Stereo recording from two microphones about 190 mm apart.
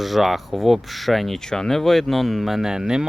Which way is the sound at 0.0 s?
Centre (ahead or behind).